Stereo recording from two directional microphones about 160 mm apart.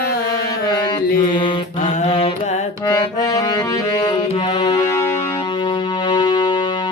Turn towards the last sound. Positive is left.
turn(degrees=30)  # may be behind; listen again after turning